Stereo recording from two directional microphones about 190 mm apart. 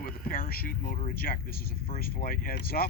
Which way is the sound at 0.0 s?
50° left (ahead or behind).